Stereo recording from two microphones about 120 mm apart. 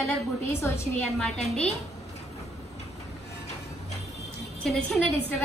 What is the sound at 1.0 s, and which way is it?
Speech, 5° left (ahead or behind).